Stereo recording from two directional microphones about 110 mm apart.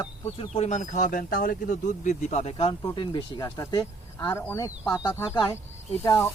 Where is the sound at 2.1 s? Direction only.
90° left.